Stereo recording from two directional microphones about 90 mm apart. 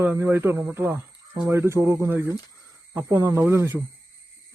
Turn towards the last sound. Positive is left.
turn(degrees=-25)  # may be behind; listen again after turning